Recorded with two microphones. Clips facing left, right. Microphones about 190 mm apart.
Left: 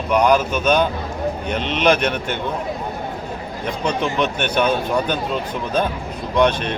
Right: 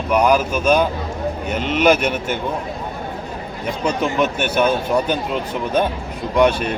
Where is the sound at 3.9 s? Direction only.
5° right (ahead or behind).